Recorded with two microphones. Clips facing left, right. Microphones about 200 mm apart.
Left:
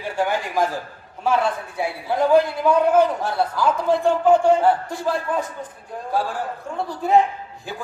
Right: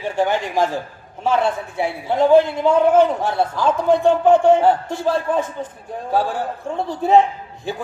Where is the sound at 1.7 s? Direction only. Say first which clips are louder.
Right 3 dB; 25° right (ahead or behind).